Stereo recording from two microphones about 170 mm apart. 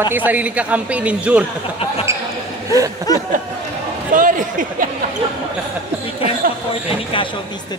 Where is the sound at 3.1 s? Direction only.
20° left (ahead or behind).